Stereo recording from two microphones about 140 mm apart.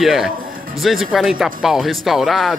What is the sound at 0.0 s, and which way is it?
Speech, centre (ahead or behind).